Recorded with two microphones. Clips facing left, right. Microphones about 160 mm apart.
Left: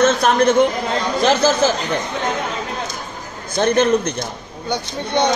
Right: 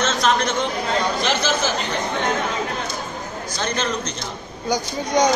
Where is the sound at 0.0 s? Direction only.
55° left (ahead or behind).